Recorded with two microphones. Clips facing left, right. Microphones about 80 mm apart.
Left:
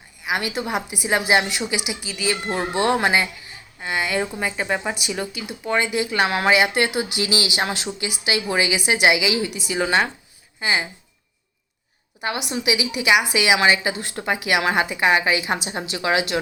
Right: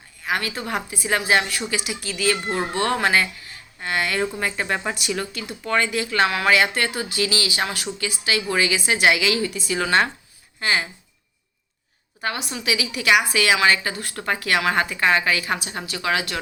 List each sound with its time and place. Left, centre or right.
0.3 s a woman's voice: centre
12.2 s a woman's voice: centre